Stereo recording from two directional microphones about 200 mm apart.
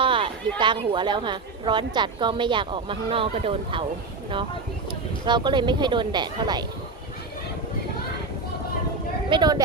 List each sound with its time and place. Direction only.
0.0 s a sound: 25° right (ahead or behind)
0.6 s a woman's voice: 25° right (ahead or behind)
5.2 s a woman's voice: 20° right (ahead or behind)
9.3 s a woman's voice: 20° right (ahead or behind)